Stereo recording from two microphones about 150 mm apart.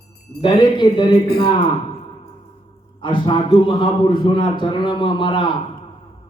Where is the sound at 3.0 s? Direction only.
35° left (ahead or behind).